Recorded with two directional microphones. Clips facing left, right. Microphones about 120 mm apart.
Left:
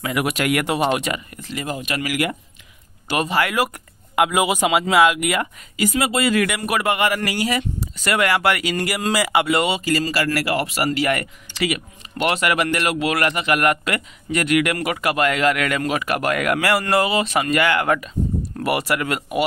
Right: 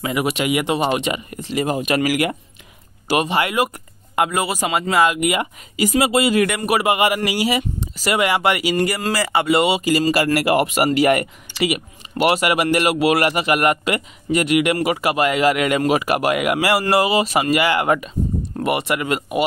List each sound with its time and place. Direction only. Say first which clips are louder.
0.0 s speech: right 1 dB; centre (ahead or behind)
1.4 s speech: right 7 dB; 20° right (ahead or behind)
3.1 s speech: right 2 dB; 5° right (ahead or behind)
5.9 s speech: right 4 dB; 20° right (ahead or behind)
6.4 s speech: right 3 dB; centre (ahead or behind)
9.0 s speech: left 1 dB; 10° left (ahead or behind)
9.5 s speech: right 3 dB; 5° right (ahead or behind)
9.8 s speech: right 4 dB; 15° right (ahead or behind)